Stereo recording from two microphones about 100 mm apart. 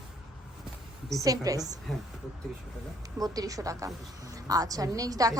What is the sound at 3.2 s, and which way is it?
A woman's voice, 35° right (ahead or behind).